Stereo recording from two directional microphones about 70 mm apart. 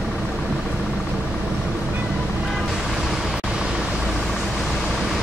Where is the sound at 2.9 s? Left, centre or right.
Centre.